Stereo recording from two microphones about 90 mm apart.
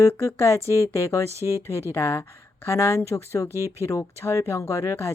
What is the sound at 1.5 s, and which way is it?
A woman's voice, 35° left (ahead or behind).